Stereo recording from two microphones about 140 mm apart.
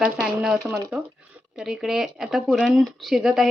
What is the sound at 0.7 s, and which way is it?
Speech, 20° right (ahead or behind).